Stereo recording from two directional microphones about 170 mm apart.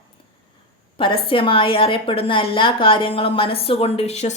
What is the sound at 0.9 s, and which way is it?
A woman's voice, 30° left (ahead or behind).